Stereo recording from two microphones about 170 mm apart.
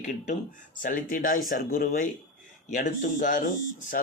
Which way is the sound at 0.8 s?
50° left (ahead or behind).